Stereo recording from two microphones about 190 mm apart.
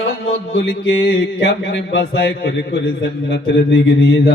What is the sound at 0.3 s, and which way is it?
Music, 90° left.